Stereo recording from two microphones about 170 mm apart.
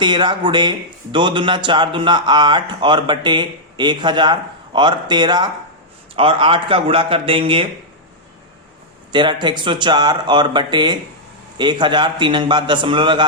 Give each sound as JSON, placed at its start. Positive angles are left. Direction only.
{"t": 0.0, "sound": "speech", "side_deg": -25}
{"t": 9.1, "sound": "speech", "side_deg": -25}